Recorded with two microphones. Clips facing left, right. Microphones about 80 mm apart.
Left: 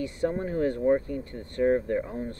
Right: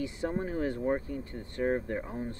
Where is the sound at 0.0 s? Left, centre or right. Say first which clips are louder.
Left 4 dB; centre.